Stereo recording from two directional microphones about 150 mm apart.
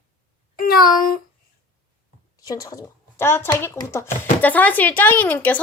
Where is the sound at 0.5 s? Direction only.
75° left (ahead or behind).